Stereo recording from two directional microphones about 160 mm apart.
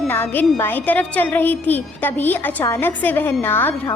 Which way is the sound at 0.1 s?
10° left (ahead or behind).